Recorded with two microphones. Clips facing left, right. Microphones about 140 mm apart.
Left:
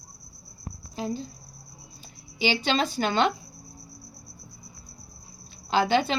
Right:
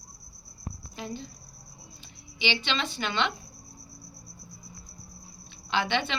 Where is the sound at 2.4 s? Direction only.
40° left (ahead or behind).